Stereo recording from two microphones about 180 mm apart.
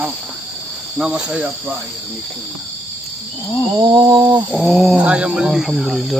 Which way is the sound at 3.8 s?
25° right (ahead or behind).